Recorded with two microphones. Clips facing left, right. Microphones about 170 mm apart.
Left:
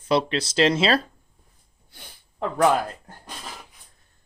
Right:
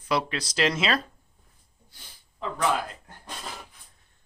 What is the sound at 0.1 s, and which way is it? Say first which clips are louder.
Speech: left 5 dB; 25° left (ahead or behind).